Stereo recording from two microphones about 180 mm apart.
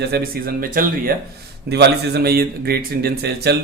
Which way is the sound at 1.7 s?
65° right (ahead or behind).